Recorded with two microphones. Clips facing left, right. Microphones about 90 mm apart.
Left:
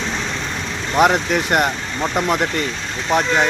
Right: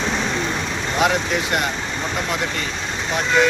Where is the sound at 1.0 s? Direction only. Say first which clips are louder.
Left 3 dB; 50° left (ahead or behind).